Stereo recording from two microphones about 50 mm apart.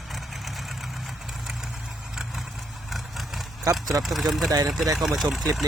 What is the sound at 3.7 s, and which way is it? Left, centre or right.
Speech, right.